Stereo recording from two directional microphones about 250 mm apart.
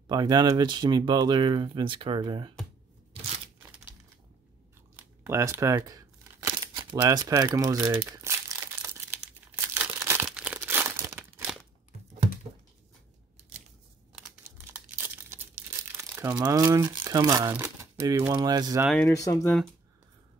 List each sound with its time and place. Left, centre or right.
0.1 s speech: centre
4.9 s crumpling: centre
14.1 s tearing: centre
19.0 s speech: centre